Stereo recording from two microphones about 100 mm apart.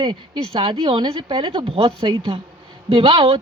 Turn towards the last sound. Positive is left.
turn(degrees=-65)  # may be behind; listen again after turning